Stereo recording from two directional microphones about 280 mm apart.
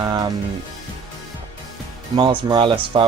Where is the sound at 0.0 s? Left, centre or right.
Centre.